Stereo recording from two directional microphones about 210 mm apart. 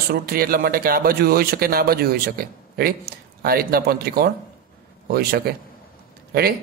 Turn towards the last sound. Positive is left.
turn(degrees=-50)  # may be behind; listen again after turning